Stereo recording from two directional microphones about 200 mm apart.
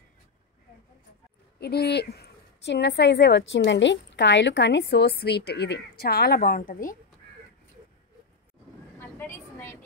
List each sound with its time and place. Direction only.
1.6 s a woman's voice: 55° left (ahead or behind)
8.9 s vehicle: 10° left (ahead or behind)